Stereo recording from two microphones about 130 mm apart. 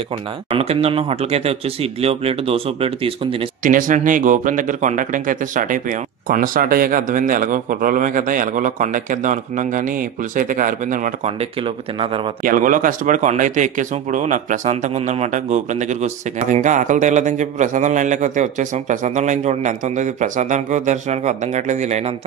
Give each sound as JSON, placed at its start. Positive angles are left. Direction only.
{"t": 0.6, "sound": "speech", "side_deg": -50}
{"t": 3.6, "sound": "speech", "side_deg": -90}
{"t": 11.2, "sound": "speech", "side_deg": -45}
{"t": 12.4, "sound": "speech", "side_deg": -90}
{"t": 15.0, "sound": "speech", "side_deg": -55}